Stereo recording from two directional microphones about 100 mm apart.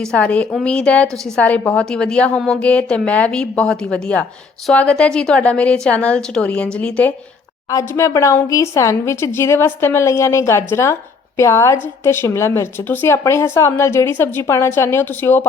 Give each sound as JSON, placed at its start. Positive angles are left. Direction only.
{"t": 0.0, "sound": "a woman's voice", "side_deg": 10}
{"t": 7.7, "sound": "a woman's voice", "side_deg": 30}